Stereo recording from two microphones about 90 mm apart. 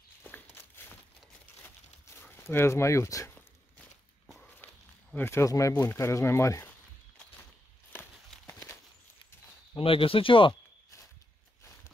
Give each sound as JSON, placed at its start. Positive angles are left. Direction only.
{"t": 0.2, "sound": "a sound", "side_deg": 25}
{"t": 2.3, "sound": "speech", "side_deg": 30}
{"t": 5.1, "sound": "speech", "side_deg": 25}
{"t": 9.8, "sound": "speech", "side_deg": 90}